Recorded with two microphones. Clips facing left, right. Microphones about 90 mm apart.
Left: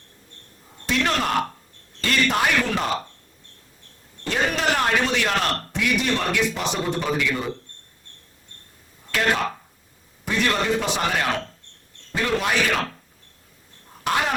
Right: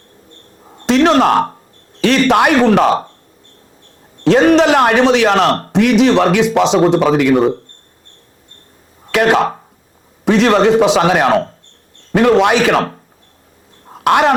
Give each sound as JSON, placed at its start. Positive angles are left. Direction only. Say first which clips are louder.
{"t": 0.9, "sound": "a sound", "louder": "right 12 dB", "side_deg": -85}
{"t": 1.3, "sound": "speech", "louder": "right 10 dB", "side_deg": -45}
{"t": 2.0, "sound": "a man's voice", "louder": "right 11 dB", "side_deg": -85}
{"t": 4.2, "sound": "a man's voice", "louder": "right 15 dB", "side_deg": -80}
{"t": 9.1, "sound": "a man's voice", "louder": "right 10 dB", "side_deg": -70}
{"t": 13.8, "sound": "a sound", "louder": "right 12 dB", "side_deg": -65}